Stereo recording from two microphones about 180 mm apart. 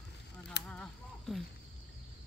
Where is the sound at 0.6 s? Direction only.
5° left (ahead or behind).